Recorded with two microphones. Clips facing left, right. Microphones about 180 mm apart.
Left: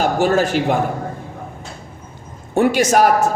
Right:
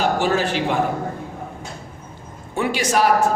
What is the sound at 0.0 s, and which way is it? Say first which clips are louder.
Speech: left 4 dB; 45° left (ahead or behind).